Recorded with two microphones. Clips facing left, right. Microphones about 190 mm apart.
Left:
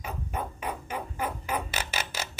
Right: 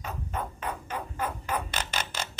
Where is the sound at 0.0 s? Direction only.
10° left (ahead or behind).